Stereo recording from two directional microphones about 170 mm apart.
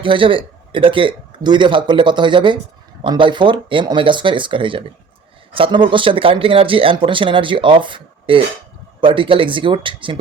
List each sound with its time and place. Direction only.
0.0 s a man's voice: 30° right (ahead or behind)